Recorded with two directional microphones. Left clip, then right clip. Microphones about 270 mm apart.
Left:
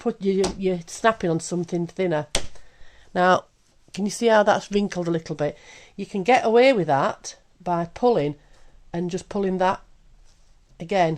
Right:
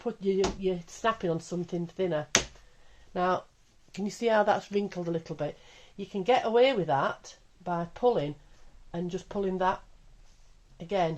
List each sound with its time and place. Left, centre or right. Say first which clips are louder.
0.0 s speech: left 5 dB; left
10.8 s speech: left 8 dB; left